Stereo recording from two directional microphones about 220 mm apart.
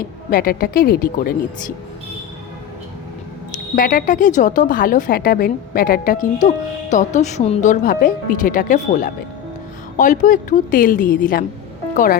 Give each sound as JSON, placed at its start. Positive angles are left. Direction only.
{"t": 0.3, "sound": "a woman's voice", "side_deg": 40}
{"t": 3.8, "sound": "a woman's voice", "side_deg": 40}